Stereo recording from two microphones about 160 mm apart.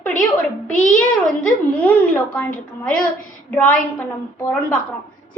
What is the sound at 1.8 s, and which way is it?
Speech, 10° left (ahead or behind).